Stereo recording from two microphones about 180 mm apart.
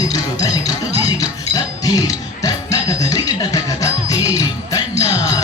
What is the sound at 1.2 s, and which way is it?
Music, 20° left (ahead or behind).